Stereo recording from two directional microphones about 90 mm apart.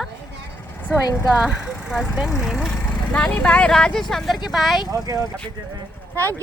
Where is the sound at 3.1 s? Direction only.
15° left (ahead or behind).